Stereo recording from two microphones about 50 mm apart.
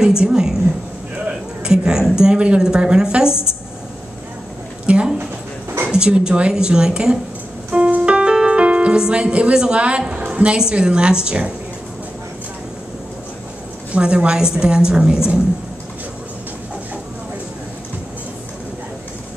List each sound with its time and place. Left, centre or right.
0.0 s a woman's voice: centre
1.2 s a sound: centre
2.1 s a woman's voice: centre
4.8 s a sound: right
5.9 s a woman's voice: centre
7.7 s music: right
13.9 s a woman's voice: right